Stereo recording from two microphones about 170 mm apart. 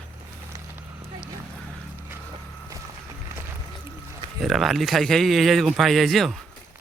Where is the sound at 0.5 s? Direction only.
20° right (ahead or behind).